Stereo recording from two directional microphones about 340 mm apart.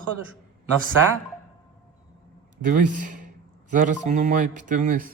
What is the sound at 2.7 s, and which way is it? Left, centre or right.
A man's voice, right.